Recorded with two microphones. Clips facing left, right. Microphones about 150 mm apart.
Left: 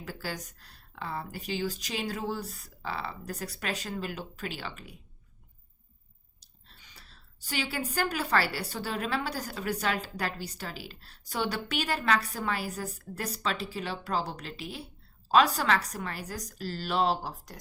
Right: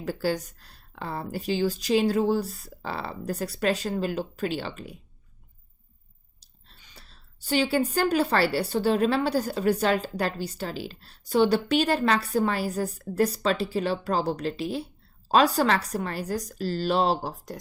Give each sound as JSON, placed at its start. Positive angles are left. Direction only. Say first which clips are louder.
{"t": 0.0, "sound": "speech", "louder": "right 10 dB", "side_deg": -30}
{"t": 6.7, "sound": "a woman's voice", "louder": "right 3 dB", "side_deg": -30}